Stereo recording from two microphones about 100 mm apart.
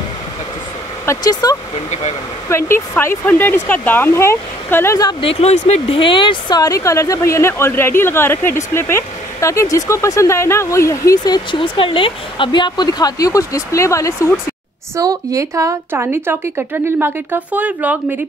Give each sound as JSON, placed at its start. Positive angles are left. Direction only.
{"t": 1.2, "sound": "speech", "side_deg": 40}
{"t": 2.5, "sound": "speech", "side_deg": 25}
{"t": 5.2, "sound": "speech", "side_deg": 80}
{"t": 6.6, "sound": "speech", "side_deg": 35}
{"t": 11.1, "sound": "speech", "side_deg": 45}
{"t": 11.6, "sound": "speech", "side_deg": 60}
{"t": 15.0, "sound": "a woman's voice", "side_deg": -35}